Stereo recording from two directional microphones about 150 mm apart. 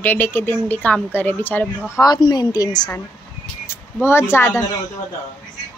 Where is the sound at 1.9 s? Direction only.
25° left (ahead or behind).